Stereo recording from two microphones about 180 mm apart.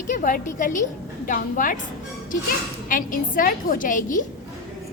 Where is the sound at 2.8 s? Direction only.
50° left (ahead or behind).